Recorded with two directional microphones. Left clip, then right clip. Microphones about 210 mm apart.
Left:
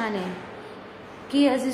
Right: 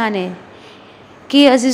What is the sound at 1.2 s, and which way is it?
Speech, 35° right (ahead or behind).